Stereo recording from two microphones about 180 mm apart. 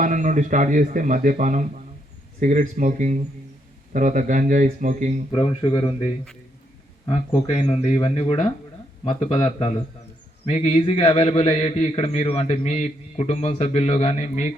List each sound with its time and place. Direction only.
0.0 s speech: 45° right (ahead or behind)
5.3 s speech: 30° left (ahead or behind)
7.6 s a man's voice: 30° left (ahead or behind)